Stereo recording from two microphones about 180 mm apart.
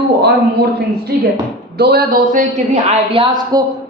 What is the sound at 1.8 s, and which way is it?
A man's voice, 60° right (ahead or behind).